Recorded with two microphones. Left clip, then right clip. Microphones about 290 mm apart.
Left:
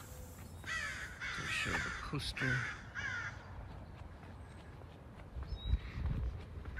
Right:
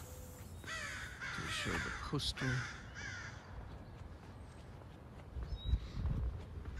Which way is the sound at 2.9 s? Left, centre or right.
Centre.